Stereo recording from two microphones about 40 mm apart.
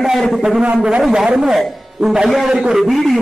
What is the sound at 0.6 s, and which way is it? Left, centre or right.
Speech, right.